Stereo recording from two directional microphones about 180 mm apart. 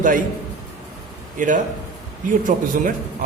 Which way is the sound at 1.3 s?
45° right (ahead or behind).